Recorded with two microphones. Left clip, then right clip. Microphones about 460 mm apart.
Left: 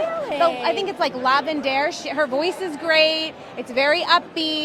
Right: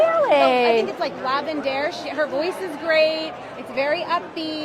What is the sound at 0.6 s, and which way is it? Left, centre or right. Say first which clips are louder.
A woman's voice: right 2 dB; left.